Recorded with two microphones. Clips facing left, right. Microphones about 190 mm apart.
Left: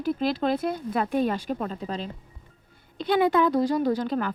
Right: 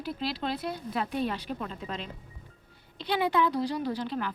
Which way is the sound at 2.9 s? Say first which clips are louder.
Left 6 dB; 50° left (ahead or behind).